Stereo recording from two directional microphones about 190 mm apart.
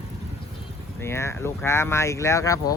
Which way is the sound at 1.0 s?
15° left (ahead or behind).